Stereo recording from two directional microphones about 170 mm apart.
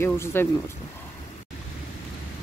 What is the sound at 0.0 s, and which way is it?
Speech, 15° left (ahead or behind).